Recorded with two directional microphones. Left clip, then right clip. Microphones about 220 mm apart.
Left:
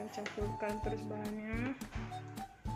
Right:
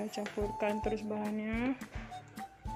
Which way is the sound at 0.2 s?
40° right (ahead or behind).